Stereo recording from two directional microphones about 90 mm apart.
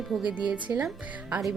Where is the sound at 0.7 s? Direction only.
35° right (ahead or behind).